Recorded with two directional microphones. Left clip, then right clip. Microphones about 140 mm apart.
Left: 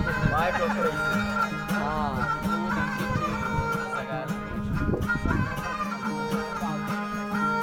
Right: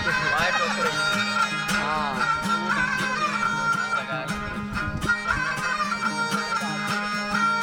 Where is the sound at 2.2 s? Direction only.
20° left (ahead or behind).